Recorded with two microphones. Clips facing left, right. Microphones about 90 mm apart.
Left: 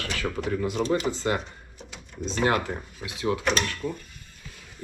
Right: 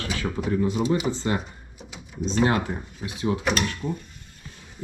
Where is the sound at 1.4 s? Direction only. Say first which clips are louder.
Right 1 dB; 5° right (ahead or behind).